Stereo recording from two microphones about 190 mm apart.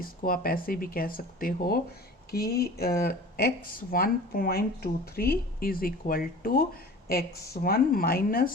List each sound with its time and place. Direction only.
0.0 s speech: 50° left (ahead or behind)